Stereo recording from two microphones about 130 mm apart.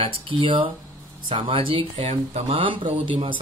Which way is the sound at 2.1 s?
60° right (ahead or behind).